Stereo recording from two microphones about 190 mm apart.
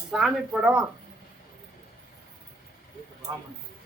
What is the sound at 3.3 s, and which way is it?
Speech, 20° right (ahead or behind).